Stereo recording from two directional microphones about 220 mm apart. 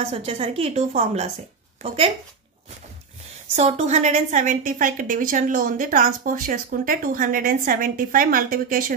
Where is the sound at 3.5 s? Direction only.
30° right (ahead or behind).